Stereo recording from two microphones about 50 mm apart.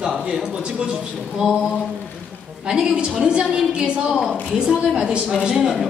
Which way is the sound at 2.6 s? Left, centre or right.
Centre.